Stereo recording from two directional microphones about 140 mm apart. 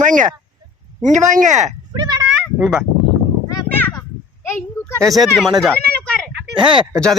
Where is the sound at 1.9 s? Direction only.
30° right (ahead or behind).